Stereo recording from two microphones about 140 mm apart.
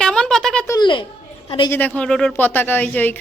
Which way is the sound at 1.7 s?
10° left (ahead or behind).